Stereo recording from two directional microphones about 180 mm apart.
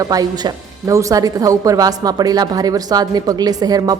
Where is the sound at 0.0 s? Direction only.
20° right (ahead or behind).